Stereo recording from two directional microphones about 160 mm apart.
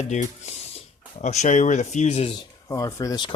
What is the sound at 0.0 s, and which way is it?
Speech, 45° left (ahead or behind).